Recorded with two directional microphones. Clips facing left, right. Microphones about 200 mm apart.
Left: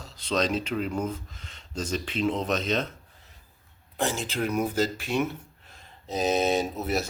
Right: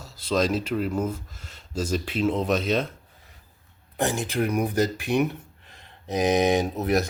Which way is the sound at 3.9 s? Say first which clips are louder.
Right 3 dB; 15° right (ahead or behind).